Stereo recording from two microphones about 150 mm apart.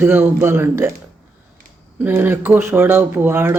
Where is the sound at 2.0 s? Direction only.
15° right (ahead or behind).